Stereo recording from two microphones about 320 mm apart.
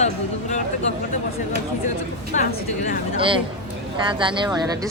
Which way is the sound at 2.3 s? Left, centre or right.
Left.